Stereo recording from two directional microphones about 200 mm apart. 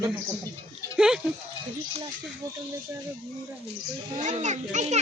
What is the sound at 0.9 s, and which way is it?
Speech, 5° right (ahead or behind).